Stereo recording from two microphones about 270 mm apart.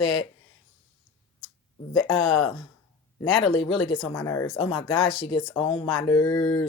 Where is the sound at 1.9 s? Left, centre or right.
Left.